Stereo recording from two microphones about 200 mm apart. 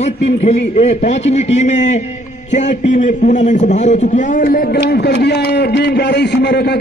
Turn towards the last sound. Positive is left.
turn(degrees=55)  # may be behind; listen again after turning